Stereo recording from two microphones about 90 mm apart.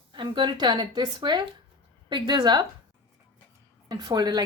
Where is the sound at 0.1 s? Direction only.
60° right (ahead or behind).